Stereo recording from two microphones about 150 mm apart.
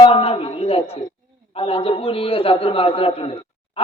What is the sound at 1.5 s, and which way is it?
A man's voice, 40° left (ahead or behind).